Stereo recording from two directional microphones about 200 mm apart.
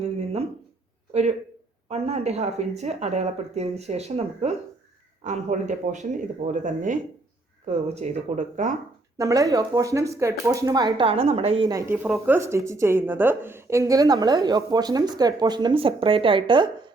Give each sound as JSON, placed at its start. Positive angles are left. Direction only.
{"t": 1.1, "sound": "speech", "side_deg": -30}
{"t": 9.1, "sound": "speech", "side_deg": -15}